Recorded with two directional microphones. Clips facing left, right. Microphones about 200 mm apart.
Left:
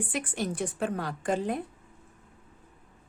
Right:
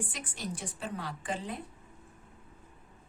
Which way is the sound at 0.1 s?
55° left (ahead or behind).